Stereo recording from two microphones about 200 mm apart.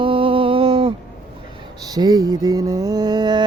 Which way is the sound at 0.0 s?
25° right (ahead or behind).